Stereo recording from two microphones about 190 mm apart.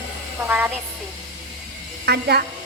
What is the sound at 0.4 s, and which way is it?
Speech, 10° right (ahead or behind).